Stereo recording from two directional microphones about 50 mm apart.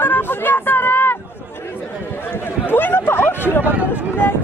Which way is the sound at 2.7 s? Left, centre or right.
Left.